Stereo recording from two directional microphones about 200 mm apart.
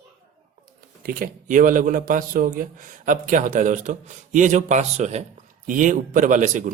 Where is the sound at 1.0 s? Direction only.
45° right (ahead or behind).